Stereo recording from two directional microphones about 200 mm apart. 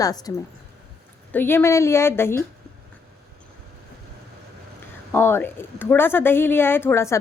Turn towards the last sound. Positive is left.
turn(degrees=15)  # may be behind; listen again after turning